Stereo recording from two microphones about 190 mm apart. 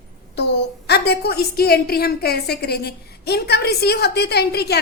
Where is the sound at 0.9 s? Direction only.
60° left (ahead or behind).